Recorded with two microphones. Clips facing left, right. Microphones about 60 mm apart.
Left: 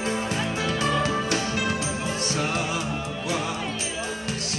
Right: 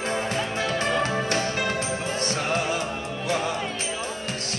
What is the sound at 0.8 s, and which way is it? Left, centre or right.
Music, right.